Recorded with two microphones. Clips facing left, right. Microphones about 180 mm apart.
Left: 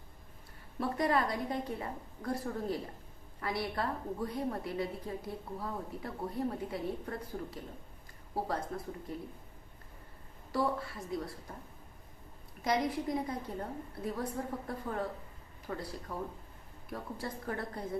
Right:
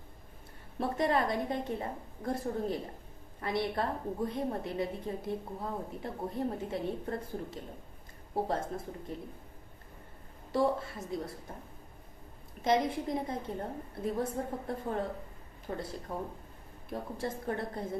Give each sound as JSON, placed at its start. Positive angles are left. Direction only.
{"t": 0.8, "sound": "a woman's voice", "side_deg": -25}
{"t": 10.5, "sound": "a woman's voice", "side_deg": -25}
{"t": 12.6, "sound": "a woman's voice", "side_deg": -25}